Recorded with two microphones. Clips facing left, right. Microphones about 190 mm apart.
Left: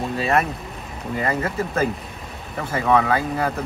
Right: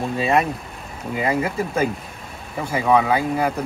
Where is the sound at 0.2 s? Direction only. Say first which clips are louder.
Right 2 dB; 15° right (ahead or behind).